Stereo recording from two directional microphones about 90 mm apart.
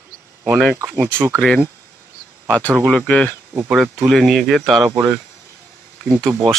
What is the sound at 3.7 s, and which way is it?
Speech, 5° right (ahead or behind).